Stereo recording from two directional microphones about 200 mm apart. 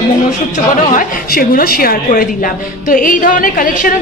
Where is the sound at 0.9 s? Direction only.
45° left (ahead or behind).